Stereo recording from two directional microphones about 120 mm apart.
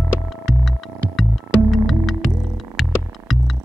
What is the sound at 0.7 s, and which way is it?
Music, centre (ahead or behind).